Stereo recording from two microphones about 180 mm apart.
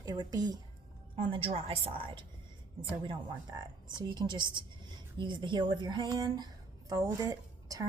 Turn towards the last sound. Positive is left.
turn(degrees=-20)  # may be behind; listen again after turning